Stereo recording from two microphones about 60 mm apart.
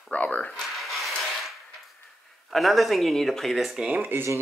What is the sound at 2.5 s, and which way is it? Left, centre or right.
Speech, centre.